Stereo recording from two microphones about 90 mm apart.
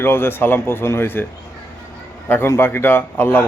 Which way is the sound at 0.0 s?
25° left (ahead or behind).